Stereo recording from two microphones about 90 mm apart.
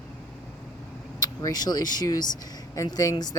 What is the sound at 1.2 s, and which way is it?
Speech, 45° left (ahead or behind).